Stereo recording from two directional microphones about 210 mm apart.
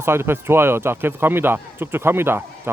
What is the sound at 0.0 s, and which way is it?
Speech, 10° right (ahead or behind).